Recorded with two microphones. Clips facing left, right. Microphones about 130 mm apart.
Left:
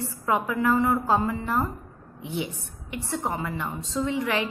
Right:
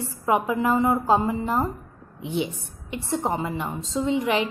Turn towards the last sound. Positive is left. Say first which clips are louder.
# right 3 dB
turn(degrees=-20)  # may be behind; listen again after turning